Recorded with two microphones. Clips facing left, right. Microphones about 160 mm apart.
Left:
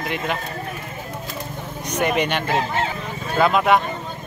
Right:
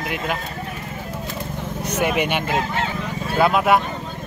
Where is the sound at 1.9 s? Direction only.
5° right (ahead or behind).